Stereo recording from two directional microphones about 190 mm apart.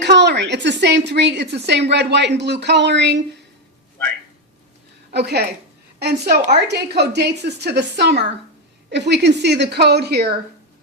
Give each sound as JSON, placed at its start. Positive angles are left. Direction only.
{"t": 0.0, "sound": "a woman's voice", "side_deg": -65}
{"t": 5.1, "sound": "a woman's voice", "side_deg": -60}